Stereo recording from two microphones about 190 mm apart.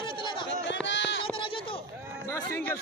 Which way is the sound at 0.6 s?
70° left (ahead or behind).